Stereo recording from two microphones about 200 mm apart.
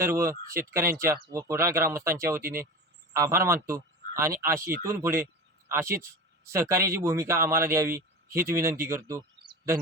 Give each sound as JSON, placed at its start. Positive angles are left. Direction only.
{"t": 0.0, "sound": "a man's voice", "side_deg": -15}
{"t": 2.4, "sound": "speech", "side_deg": -45}
{"t": 3.1, "sound": "a man's voice", "side_deg": -15}